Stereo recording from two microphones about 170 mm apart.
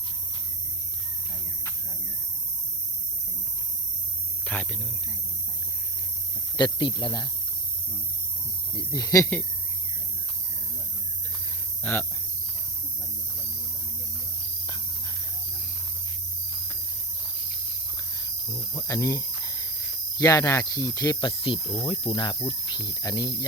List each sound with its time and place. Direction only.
4.5 s a sound: 10° left (ahead or behind)
6.6 s speech: 25° left (ahead or behind)
8.7 s speech: 20° left (ahead or behind)
11.8 s speech: 10° left (ahead or behind)
18.2 s cricket: 20° left (ahead or behind)
21.8 s speech: 30° left (ahead or behind)